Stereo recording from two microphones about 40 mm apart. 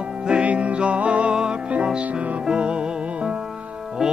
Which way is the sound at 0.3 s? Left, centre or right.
Right.